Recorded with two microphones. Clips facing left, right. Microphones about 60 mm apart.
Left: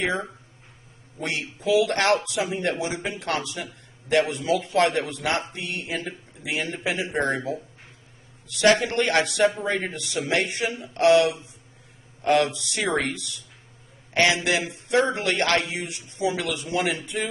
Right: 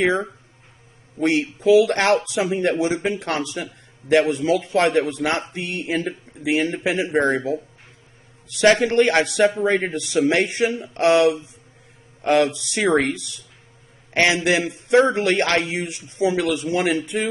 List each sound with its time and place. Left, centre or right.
1.2 s a man's voice: right
8.8 s a man's voice: right